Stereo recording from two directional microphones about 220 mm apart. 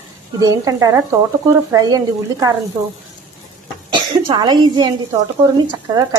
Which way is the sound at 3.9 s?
20° right (ahead or behind).